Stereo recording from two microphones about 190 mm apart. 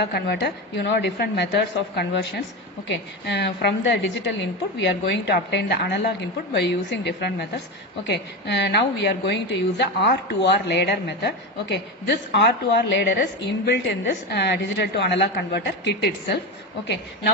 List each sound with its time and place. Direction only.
0.0 s a woman's voice: 60° left (ahead or behind)